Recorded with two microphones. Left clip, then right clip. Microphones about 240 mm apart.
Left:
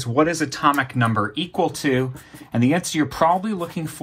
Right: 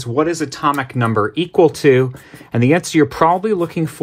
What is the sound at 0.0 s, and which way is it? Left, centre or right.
Speech, right.